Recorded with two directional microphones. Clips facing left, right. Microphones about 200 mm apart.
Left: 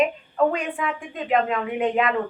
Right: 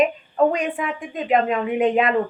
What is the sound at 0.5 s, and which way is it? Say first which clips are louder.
A woman's voice: right 2 dB; 20° right (ahead or behind).